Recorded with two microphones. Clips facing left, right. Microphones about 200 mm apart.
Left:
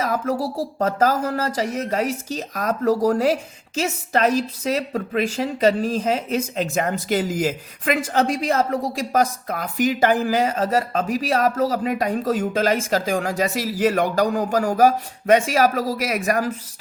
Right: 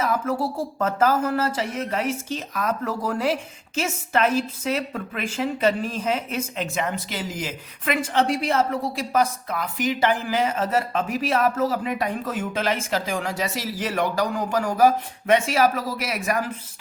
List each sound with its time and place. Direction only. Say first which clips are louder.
0.0 s a woman's voice: left 1 dB; 40° left (ahead or behind)